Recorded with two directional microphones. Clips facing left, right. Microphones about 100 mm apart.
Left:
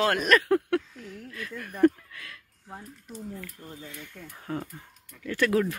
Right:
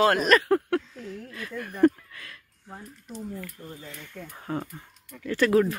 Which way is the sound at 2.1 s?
Centre (ahead or behind).